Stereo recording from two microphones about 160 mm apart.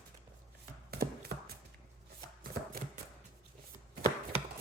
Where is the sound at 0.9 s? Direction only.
80° right.